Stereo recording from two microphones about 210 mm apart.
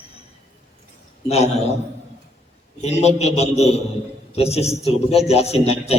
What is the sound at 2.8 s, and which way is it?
A man's voice, 30° left (ahead or behind).